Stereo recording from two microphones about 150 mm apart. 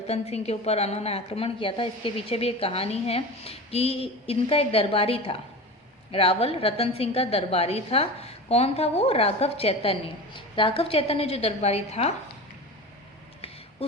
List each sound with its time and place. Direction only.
0.1 s a woman's voice: 45° left (ahead or behind)